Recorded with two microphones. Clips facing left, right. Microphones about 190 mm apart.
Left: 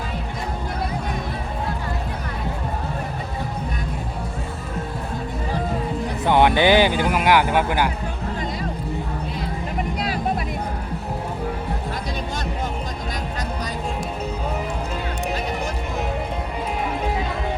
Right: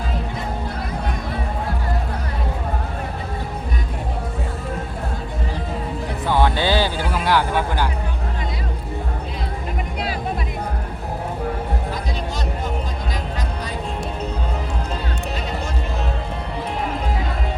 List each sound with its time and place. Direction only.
6.2 s music: 20° left (ahead or behind)